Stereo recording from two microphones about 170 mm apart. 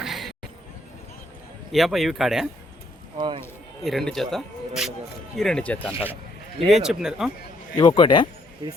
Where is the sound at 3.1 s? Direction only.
30° right (ahead or behind).